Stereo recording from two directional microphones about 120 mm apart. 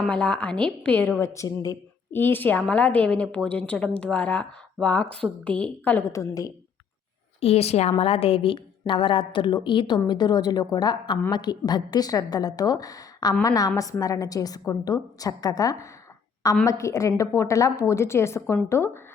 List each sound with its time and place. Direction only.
0.1 s a woman's voice: 10° left (ahead or behind)
1.2 s a woman's voice: 25° left (ahead or behind)
2.1 s a woman's voice: 15° left (ahead or behind)
6.1 s a woman's voice: 30° left (ahead or behind)
7.4 s a woman's voice: 60° left (ahead or behind); by 18.9 s 25° left (ahead or behind)